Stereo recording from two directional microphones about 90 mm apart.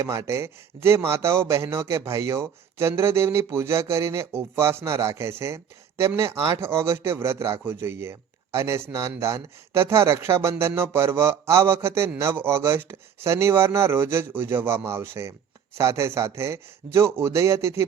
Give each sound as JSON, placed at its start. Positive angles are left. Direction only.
{"t": 0.0, "sound": "a man's voice", "side_deg": -35}